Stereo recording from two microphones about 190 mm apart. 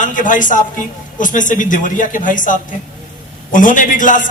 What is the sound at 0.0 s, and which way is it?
A man's voice, 45° left (ahead or behind).